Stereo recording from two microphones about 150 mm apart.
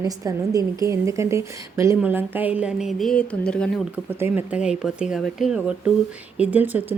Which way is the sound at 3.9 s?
15° right (ahead or behind).